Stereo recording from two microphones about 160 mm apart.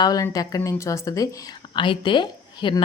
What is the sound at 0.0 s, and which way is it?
A woman's voice, 25° left (ahead or behind).